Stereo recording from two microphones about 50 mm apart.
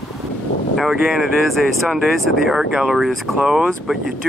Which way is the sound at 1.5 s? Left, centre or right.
Centre.